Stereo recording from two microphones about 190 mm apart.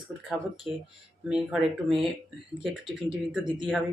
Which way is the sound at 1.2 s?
5° right (ahead or behind).